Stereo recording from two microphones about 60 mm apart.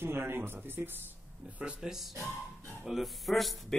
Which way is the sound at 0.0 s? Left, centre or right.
Right.